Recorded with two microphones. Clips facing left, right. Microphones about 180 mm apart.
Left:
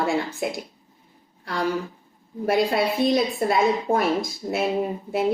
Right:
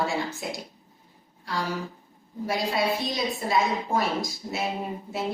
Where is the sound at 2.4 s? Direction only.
55° left (ahead or behind).